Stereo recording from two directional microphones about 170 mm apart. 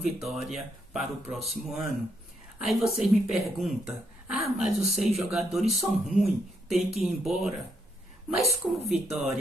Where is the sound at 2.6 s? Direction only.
Centre (ahead or behind).